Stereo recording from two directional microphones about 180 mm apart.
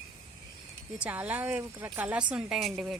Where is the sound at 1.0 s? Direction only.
10° right (ahead or behind).